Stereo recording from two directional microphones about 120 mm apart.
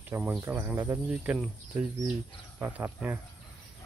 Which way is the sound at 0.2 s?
10° right (ahead or behind).